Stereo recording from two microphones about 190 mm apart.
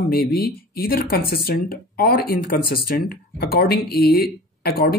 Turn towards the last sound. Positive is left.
turn(degrees=55)  # may be behind; listen again after turning